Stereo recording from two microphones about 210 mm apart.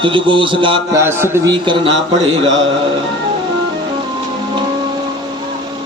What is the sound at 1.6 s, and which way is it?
Speech, 25° right (ahead or behind).